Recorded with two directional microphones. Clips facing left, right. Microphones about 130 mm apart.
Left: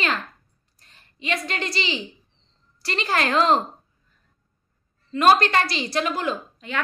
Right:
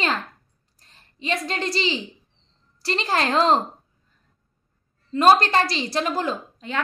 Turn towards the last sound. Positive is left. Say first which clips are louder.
# even
turn(degrees=-35)  # may be behind; listen again after turning